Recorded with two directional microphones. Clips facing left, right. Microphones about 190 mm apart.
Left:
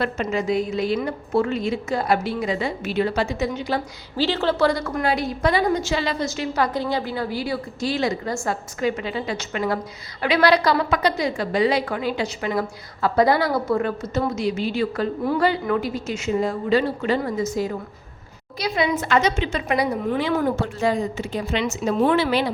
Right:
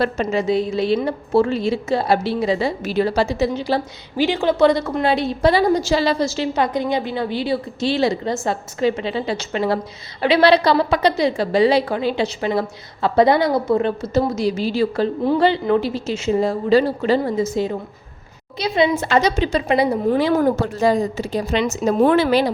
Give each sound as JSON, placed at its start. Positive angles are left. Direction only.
{"t": 0.0, "sound": "a woman's voice", "side_deg": -35}
{"t": 4.2, "sound": "a woman's voice", "side_deg": -15}
{"t": 14.1, "sound": "a woman's voice", "side_deg": -35}